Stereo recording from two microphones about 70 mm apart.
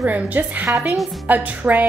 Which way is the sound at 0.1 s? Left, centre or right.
Right.